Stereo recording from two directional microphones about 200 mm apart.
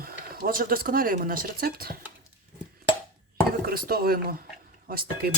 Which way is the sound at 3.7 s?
50° right (ahead or behind).